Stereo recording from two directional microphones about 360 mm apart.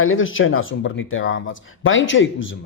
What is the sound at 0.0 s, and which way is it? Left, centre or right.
Speech, left.